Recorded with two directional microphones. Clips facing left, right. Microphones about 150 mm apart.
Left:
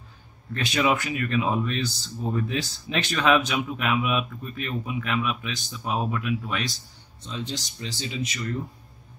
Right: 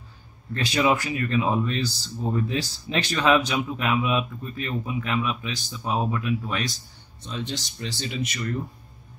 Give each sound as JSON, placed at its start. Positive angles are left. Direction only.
{"t": 0.6, "sound": "speech", "side_deg": -35}
{"t": 7.2, "sound": "speech", "side_deg": -60}